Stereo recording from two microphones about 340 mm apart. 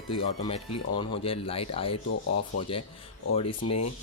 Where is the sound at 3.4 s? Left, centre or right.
Left.